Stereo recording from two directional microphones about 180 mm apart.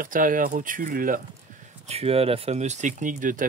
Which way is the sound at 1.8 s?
35° right (ahead or behind).